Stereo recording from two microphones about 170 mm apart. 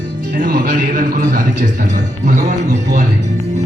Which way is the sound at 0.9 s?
50° right (ahead or behind).